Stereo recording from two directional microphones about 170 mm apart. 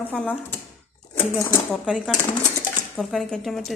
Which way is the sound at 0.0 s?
10° left (ahead or behind).